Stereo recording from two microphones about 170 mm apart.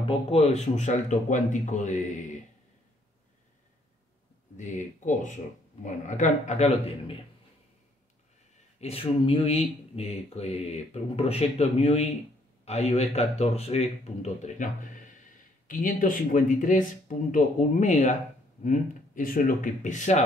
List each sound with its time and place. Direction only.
0.0 s speech: 35° left (ahead or behind)
4.6 s speech: 45° left (ahead or behind)
8.7 s speech: 35° left (ahead or behind)